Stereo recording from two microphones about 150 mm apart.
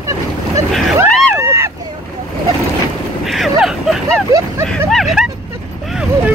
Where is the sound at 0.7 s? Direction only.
Centre (ahead or behind).